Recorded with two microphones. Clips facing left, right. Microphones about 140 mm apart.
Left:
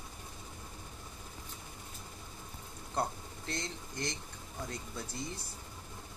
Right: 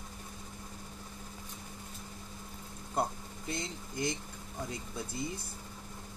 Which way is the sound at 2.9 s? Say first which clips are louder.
Right 2 dB; 10° right (ahead or behind).